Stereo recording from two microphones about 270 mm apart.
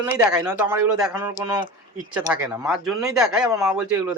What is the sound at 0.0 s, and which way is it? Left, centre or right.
Speech, centre.